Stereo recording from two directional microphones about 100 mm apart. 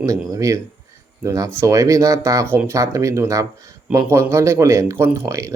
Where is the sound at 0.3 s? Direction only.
35° right (ahead or behind).